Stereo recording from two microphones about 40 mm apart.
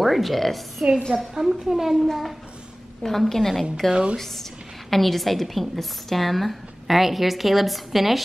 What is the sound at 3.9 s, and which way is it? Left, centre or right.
Speech, right.